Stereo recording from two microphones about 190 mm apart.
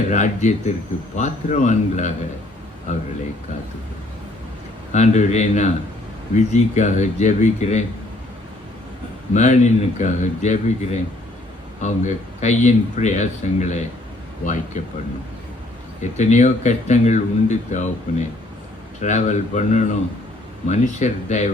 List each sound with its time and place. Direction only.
0.1 s speech: 40° left (ahead or behind)
4.9 s speech: 35° left (ahead or behind)
9.3 s speech: 40° left (ahead or behind)
16.1 s speech: 35° left (ahead or behind)